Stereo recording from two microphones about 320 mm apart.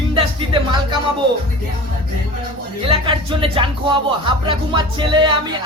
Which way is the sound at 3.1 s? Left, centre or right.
Centre.